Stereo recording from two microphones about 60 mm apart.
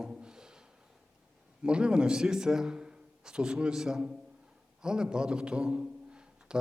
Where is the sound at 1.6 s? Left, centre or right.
Centre.